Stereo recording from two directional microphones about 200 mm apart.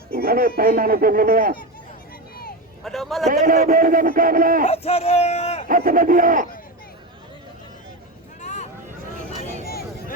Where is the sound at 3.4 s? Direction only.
45° right (ahead or behind).